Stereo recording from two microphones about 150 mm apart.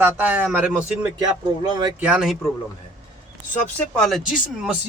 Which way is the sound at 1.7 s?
25° right (ahead or behind).